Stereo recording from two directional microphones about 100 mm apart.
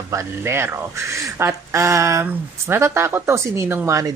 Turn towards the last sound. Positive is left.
turn(degrees=-25)  # may be behind; listen again after turning